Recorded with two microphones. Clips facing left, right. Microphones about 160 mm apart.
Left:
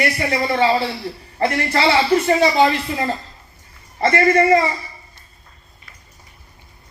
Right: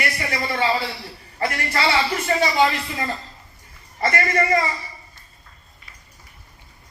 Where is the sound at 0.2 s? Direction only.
25° left (ahead or behind).